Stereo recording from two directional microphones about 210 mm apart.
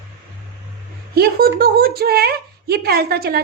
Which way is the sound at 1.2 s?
45° right (ahead or behind).